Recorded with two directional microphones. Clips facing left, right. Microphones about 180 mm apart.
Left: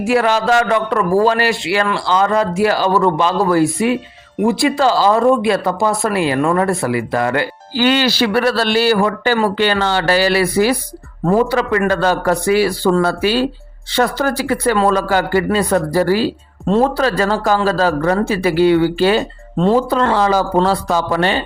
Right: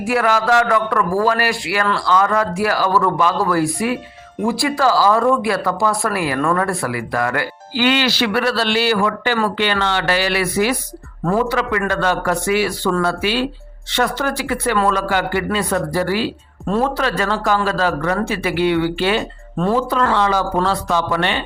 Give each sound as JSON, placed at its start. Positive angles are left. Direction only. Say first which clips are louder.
{"t": 0.0, "sound": "speech", "louder": "left 3 dB", "side_deg": 25}
{"t": 7.8, "sound": "speech", "louder": "left 3 dB", "side_deg": 40}
{"t": 16.6, "sound": "speech", "louder": "left 4 dB", "side_deg": 25}
{"t": 17.0, "sound": "speech", "louder": "left 4 dB", "side_deg": 35}
{"t": 19.5, "sound": "speech", "louder": "left 4 dB", "side_deg": 25}